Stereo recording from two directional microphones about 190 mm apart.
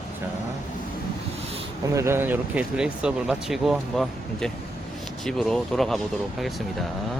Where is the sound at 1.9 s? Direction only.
15° right (ahead or behind).